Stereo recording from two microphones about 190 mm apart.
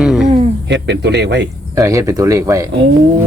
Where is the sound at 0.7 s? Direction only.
65° right (ahead or behind).